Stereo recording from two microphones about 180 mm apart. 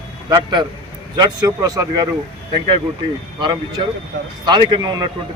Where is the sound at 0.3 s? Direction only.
25° right (ahead or behind).